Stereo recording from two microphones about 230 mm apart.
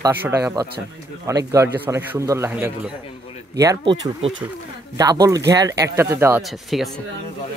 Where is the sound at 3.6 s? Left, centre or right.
Centre.